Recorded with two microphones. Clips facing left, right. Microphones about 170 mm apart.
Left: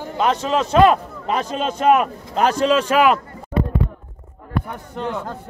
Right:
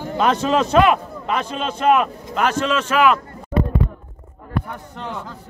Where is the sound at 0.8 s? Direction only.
40° left (ahead or behind).